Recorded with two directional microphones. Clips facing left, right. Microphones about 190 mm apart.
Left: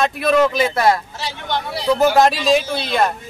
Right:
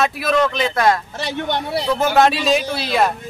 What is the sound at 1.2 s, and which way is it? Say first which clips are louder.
Speech: right 4 dB; 60° right (ahead or behind).